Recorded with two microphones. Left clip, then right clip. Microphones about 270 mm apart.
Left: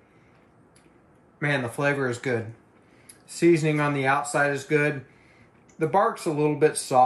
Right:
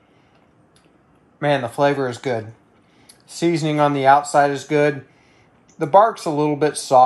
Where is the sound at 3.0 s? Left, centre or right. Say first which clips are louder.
Even; right.